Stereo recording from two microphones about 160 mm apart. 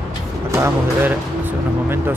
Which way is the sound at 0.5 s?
15° right (ahead or behind).